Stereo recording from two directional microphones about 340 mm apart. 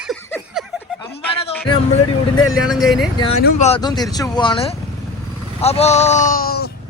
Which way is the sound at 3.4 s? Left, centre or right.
Left.